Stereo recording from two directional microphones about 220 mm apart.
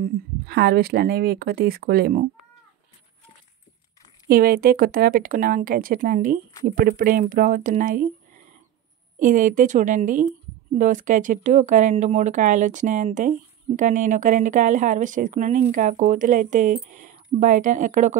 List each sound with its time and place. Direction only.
0.0 s speech: 45° right (ahead or behind)
4.3 s speech: 40° right (ahead or behind)
9.2 s speech: 35° right (ahead or behind)